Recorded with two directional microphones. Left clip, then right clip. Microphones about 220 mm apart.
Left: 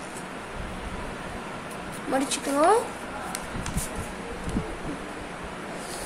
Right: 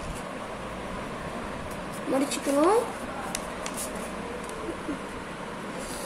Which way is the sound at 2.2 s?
20° left (ahead or behind).